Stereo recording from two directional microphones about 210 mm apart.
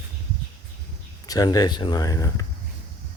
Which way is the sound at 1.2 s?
20° left (ahead or behind).